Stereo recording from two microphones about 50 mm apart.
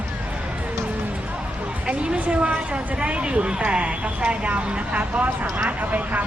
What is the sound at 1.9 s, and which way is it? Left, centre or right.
Speech, right.